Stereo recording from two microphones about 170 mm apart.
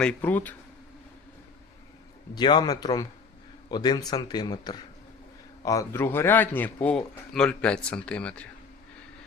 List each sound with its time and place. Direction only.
0.0 s speech: 10° left (ahead or behind)
2.3 s a man's voice: 25° left (ahead or behind); by 8.4 s 5° left (ahead or behind)